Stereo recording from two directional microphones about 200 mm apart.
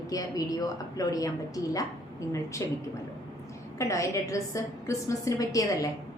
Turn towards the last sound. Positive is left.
turn(degrees=15)  # may be behind; listen again after turning